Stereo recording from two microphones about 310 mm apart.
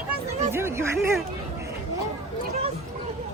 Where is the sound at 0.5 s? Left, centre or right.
Centre.